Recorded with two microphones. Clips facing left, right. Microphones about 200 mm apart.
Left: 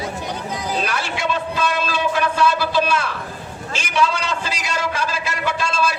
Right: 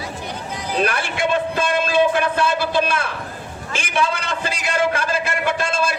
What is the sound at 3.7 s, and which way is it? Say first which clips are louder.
A man's voice: left 1 dB; 55° right (ahead or behind).